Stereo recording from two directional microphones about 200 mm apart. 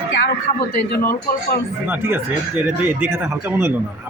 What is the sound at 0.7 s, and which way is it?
Speech, 50° left (ahead or behind).